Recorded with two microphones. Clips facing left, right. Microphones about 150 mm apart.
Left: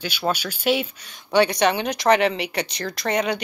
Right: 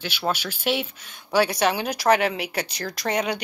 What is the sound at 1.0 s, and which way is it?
Speech, 5° right (ahead or behind).